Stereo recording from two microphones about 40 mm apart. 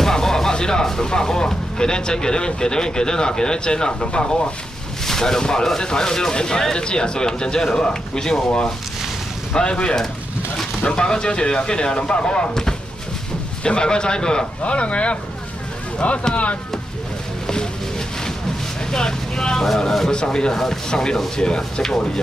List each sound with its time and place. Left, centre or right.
0.0 s speech: centre
9.5 s speech: left
13.7 s speech: left
14.6 s speech: left
17.5 s a sound: centre
18.9 s speech: centre
20.1 s speech: left
20.5 s speech: centre